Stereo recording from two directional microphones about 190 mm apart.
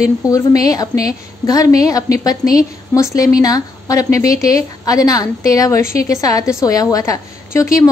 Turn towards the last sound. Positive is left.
turn(degrees=15)  # may be behind; listen again after turning